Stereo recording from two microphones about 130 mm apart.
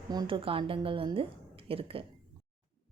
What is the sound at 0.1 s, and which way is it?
A woman's voice, 35° right (ahead or behind).